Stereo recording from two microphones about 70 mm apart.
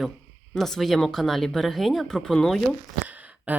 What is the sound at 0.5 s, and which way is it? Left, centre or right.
Speech, centre.